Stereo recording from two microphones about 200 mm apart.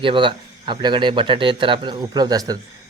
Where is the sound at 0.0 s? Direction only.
25° right (ahead or behind).